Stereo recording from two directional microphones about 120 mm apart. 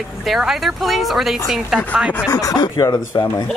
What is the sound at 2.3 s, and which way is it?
Speech, 30° left (ahead or behind).